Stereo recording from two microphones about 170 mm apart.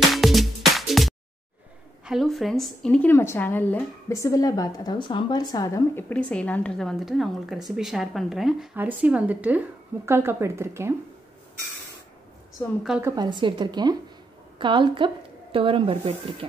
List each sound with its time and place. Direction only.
0.1 s music: centre (ahead or behind)
2.0 s a woman's voice: centre (ahead or behind); by 6.0 s 20° left (ahead or behind)
6.0 s a woman's voice: 5° left (ahead or behind); by 11.0 s 15° right (ahead or behind)
12.6 s a woman's voice: 15° left (ahead or behind)
13.0 s a woman's voice: 25° right (ahead or behind)